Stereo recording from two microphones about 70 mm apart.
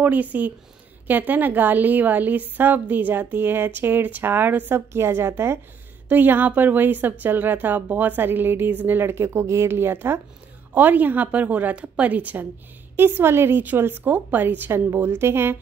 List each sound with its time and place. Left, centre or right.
0.0 s a woman's voice: right